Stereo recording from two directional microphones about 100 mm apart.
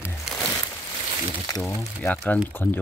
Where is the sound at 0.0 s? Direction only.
5° right (ahead or behind).